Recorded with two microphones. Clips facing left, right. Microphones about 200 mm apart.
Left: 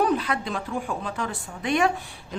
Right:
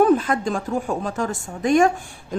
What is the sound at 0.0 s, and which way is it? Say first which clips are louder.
Speech: right 7 dB; 50° right (ahead or behind).